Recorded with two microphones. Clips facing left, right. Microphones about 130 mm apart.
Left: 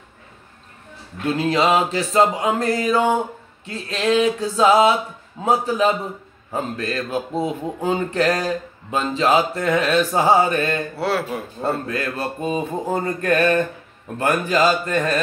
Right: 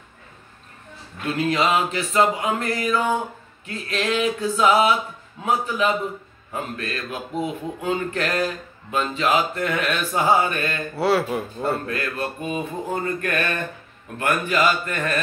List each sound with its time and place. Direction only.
1.3 s speech: 30° left (ahead or behind)
11.0 s speech: centre (ahead or behind)
11.6 s speech: 35° left (ahead or behind)